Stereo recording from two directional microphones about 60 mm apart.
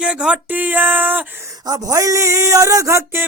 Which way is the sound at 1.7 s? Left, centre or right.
Right.